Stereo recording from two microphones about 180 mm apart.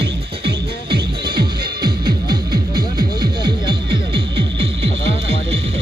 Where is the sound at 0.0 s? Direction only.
65° right (ahead or behind).